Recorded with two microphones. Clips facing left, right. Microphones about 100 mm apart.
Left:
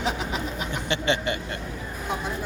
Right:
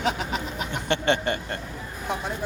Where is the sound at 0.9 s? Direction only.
50° right (ahead or behind).